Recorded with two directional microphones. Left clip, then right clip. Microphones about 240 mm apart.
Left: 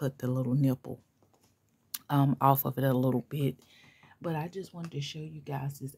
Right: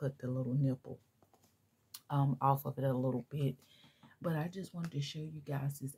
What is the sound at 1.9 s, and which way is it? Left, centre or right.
Speech, left.